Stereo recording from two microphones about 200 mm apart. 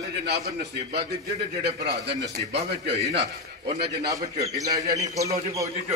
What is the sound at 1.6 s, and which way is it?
A man's voice, 55° right (ahead or behind).